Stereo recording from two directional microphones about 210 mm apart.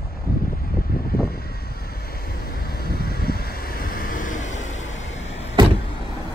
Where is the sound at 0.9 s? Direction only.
45° left (ahead or behind).